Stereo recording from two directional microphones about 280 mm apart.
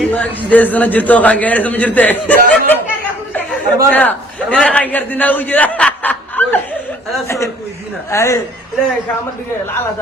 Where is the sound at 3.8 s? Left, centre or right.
Centre.